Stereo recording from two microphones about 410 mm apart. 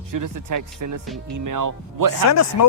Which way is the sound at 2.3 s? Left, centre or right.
Left.